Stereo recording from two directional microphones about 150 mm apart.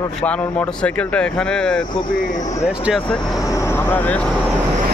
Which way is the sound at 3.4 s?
20° left (ahead or behind).